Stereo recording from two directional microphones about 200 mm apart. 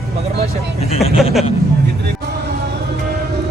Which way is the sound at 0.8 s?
30° left (ahead or behind).